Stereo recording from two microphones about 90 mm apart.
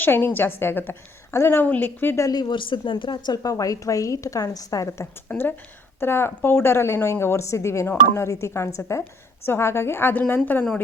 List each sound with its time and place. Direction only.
0.0 s a woman's voice: 25° left (ahead or behind)
2.2 s a woman's voice: 50° left (ahead or behind)
3.3 s a woman's voice: 40° left (ahead or behind)
5.3 s a woman's voice: 20° left (ahead or behind)